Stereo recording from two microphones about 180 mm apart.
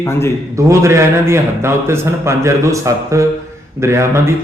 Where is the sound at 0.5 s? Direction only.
15° right (ahead or behind).